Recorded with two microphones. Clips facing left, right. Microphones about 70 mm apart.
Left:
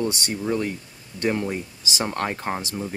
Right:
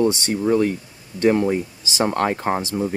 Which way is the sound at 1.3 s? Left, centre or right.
Centre.